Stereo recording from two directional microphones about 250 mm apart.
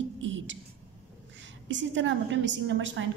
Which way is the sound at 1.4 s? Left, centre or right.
Right.